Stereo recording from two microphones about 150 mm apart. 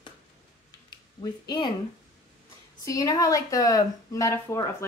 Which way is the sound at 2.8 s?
20° left (ahead or behind).